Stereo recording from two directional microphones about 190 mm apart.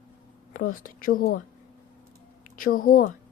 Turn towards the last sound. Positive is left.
turn(degrees=50)  # may be behind; listen again after turning